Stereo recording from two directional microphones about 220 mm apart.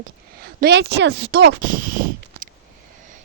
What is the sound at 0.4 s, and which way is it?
Speech, 50° right (ahead or behind).